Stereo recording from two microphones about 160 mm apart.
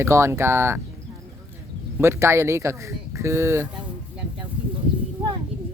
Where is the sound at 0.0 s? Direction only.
15° right (ahead or behind).